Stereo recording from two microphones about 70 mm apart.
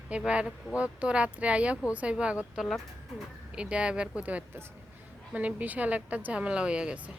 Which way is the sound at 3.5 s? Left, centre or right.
Centre.